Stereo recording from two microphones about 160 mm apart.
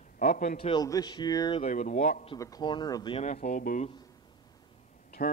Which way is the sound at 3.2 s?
45° left (ahead or behind).